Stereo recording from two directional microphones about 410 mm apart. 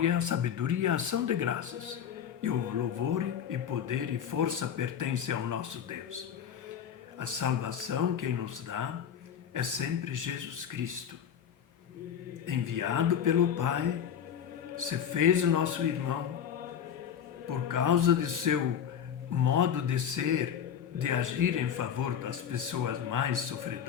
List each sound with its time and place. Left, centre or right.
0.0 s speech: right
12.5 s speech: right
17.7 s speech: right